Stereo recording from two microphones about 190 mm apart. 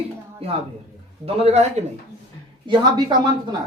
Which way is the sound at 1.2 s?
30° right (ahead or behind).